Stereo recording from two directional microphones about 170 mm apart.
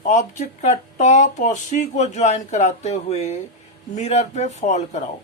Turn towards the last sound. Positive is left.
turn(degrees=40)  # may be behind; listen again after turning